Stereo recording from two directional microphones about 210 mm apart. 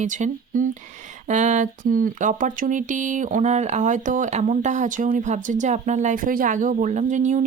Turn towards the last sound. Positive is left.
turn(degrees=-35)  # may be behind; listen again after turning